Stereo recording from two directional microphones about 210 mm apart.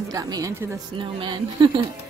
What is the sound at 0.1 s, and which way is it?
A woman's voice, 15° right (ahead or behind).